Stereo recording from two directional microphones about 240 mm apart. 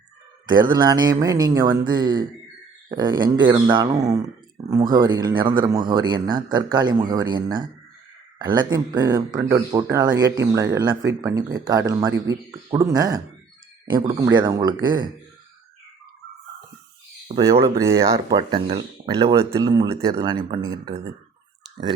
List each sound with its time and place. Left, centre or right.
0.4 s speech: centre
17.6 s speech: centre